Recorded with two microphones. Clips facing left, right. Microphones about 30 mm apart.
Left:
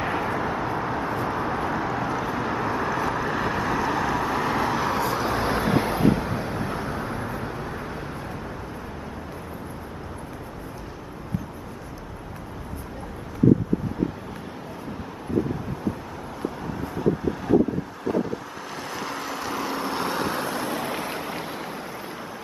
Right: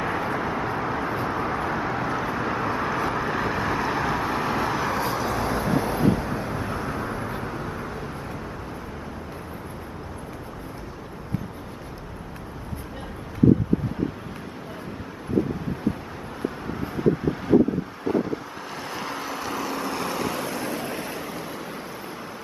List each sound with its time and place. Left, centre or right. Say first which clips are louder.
0.0 s vehicle: even; centre
0.3 s vehicle: even; centre
5.3 s vehicle: left 1 dB; left
6.0 s vehicle: left 1 dB; left
6.3 s vehicle: even; centre
16.9 s vehicle: right 2 dB; centre
19.6 s vehicle: left 2 dB; centre
20.2 s vehicle: left 1 dB; left
20.5 s waves: left 2 dB; left
21.2 s vehicle: left 2 dB; left